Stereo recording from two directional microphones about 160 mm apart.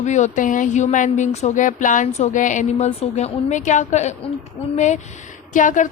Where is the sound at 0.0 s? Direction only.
50° left (ahead or behind).